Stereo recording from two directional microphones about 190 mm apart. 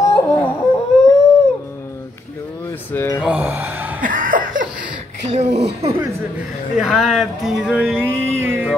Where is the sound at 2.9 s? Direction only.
10° left (ahead or behind).